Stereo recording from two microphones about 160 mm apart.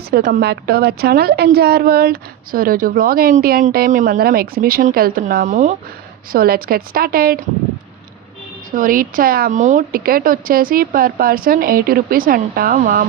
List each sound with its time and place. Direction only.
0.1 s a woman's voice: 75° right (ahead or behind); by 5.7 s 50° right (ahead or behind)
6.3 s a woman's voice: 70° right (ahead or behind)
8.7 s speech: 60° right (ahead or behind)
9.6 s speech: 50° right (ahead or behind)